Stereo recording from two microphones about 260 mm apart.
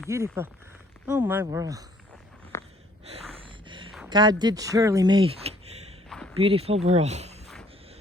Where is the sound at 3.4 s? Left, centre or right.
Centre.